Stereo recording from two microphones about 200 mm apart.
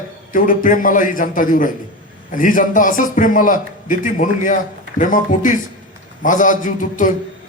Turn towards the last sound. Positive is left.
turn(degrees=40)  # may be behind; listen again after turning